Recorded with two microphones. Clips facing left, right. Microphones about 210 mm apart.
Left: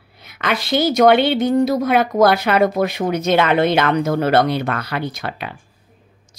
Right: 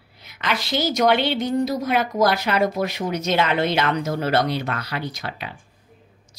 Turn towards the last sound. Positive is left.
turn(degrees=55)  # may be behind; listen again after turning